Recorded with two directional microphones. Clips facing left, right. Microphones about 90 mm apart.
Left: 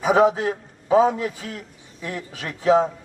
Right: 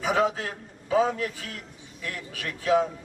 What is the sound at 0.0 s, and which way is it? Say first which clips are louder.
A man's voice: left 7 dB; 20° left (ahead or behind).